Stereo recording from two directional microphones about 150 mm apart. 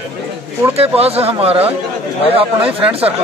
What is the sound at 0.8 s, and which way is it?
Speech, 40° right (ahead or behind).